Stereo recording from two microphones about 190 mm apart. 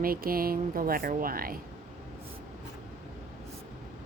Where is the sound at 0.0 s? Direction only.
50° right (ahead or behind).